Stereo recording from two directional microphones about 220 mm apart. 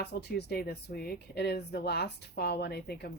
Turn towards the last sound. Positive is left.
turn(degrees=45)  # may be behind; listen again after turning